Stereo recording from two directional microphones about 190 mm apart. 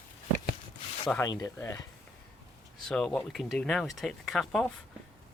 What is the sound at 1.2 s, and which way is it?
Speech, 20° left (ahead or behind).